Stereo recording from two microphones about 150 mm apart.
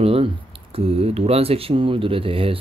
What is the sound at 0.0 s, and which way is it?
Speech, 40° right (ahead or behind).